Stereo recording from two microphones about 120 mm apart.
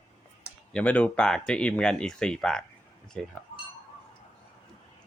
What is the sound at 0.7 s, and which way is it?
Speech, 10° left (ahead or behind).